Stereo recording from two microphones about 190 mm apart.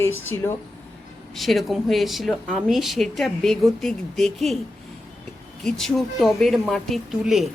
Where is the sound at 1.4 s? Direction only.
Centre (ahead or behind).